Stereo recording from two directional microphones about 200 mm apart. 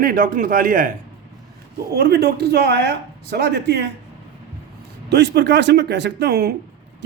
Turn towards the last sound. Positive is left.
turn(degrees=-55)  # may be behind; listen again after turning